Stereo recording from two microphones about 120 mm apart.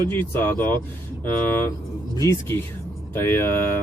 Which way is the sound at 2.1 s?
30° left (ahead or behind).